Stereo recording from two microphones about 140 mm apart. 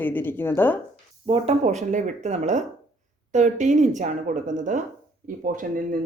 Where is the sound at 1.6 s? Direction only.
60° right (ahead or behind).